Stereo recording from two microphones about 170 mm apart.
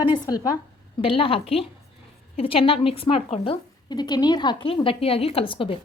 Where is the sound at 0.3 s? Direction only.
20° left (ahead or behind).